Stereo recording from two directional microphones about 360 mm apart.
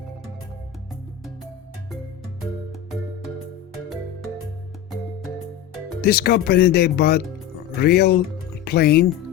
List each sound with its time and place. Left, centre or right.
6.0 s speech: left